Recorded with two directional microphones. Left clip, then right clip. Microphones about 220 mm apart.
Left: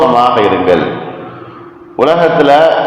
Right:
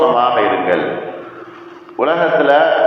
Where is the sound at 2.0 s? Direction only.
50° left (ahead or behind).